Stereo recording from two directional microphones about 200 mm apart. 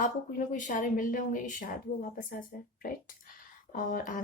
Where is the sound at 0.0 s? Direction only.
40° left (ahead or behind).